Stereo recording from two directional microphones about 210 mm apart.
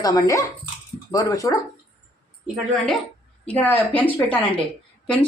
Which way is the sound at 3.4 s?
10° left (ahead or behind).